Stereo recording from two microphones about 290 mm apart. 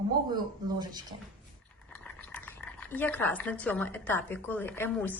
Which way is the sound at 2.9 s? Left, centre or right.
Centre.